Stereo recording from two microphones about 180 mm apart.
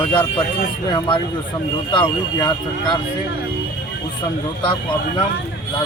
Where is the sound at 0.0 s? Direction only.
10° left (ahead or behind).